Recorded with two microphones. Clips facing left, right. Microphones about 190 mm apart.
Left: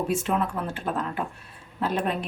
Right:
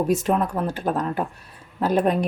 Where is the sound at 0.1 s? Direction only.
40° right (ahead or behind).